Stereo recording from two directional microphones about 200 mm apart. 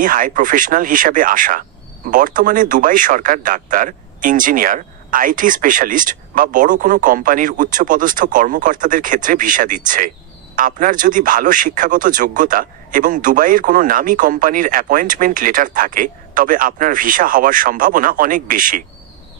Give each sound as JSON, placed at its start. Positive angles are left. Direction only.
{"t": 0.0, "sound": "a man's voice", "side_deg": -40}